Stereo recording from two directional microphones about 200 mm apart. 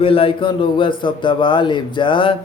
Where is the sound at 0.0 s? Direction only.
25° left (ahead or behind).